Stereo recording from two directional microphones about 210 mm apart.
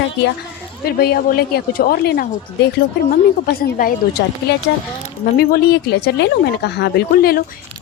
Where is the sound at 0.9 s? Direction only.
50° left (ahead or behind).